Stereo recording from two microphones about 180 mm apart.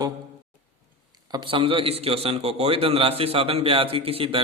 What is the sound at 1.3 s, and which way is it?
A man's voice, 25° right (ahead or behind).